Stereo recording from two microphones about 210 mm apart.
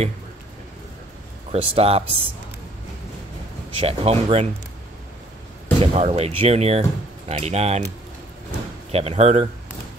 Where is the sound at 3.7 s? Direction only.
30° right (ahead or behind).